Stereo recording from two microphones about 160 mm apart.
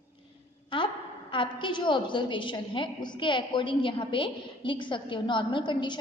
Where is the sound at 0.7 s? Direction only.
30° left (ahead or behind).